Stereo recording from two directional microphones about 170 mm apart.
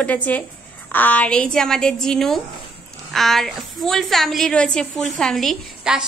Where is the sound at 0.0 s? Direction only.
10° left (ahead or behind).